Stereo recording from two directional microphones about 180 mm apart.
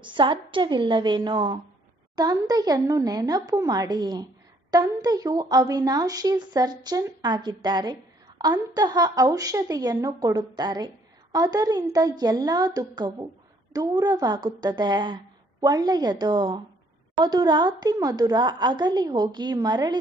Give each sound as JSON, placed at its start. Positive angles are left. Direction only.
{"t": 0.0, "sound": "speech", "side_deg": -25}